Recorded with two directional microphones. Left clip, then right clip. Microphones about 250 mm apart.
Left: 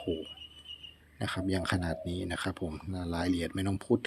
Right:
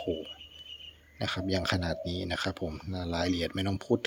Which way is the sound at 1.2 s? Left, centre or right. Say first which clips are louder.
Right 2 dB; centre.